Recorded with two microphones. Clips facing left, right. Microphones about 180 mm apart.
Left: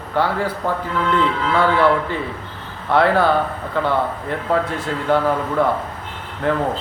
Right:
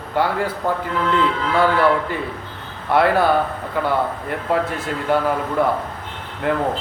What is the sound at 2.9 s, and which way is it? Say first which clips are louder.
Speech: left 1 dB; 10° right (ahead or behind).